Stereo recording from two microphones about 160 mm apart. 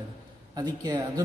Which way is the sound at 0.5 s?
25° right (ahead or behind).